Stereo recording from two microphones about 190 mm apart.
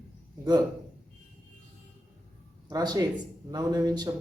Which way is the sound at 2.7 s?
20° right (ahead or behind).